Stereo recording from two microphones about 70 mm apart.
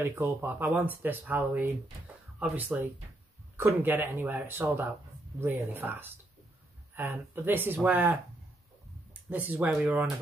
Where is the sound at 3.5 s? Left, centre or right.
Right.